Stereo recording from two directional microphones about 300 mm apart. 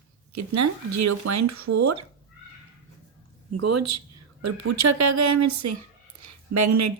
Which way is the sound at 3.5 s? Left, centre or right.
Right.